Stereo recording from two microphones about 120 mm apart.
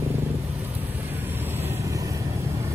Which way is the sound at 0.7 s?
15° right (ahead or behind).